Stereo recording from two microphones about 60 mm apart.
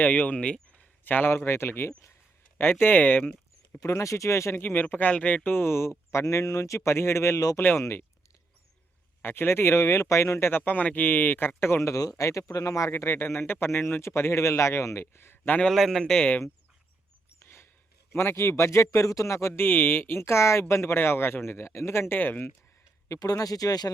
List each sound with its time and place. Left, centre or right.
0.0 s speech: left
1.5 s speech: left
3.8 s speech: left
4.5 s speech: left
9.2 s speech: left
10.6 s a man's voice: left
11.9 s speech: left
12.9 s speech: left
15.7 s a man's voice: centre
17.4 s a sound: left
18.1 s speech: left
19.6 s speech: left
23.0 s speech: left